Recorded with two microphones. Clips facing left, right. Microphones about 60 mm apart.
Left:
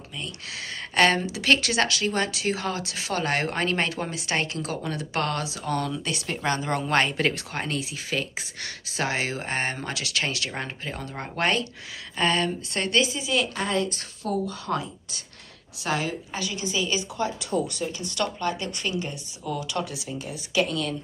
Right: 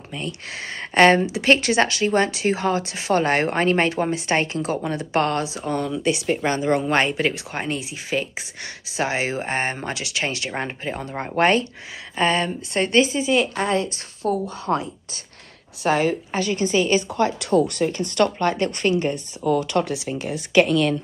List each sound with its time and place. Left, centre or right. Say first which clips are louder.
0.1 s a woman's voice: right 6 dB; right
17.2 s speech: right 7 dB; right